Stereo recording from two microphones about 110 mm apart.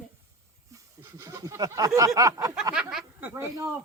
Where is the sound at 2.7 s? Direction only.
5° right (ahead or behind).